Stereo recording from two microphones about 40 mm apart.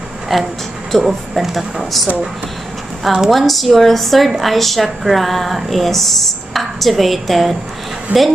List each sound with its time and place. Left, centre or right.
0.3 s a woman's voice: centre
8.1 s speech: right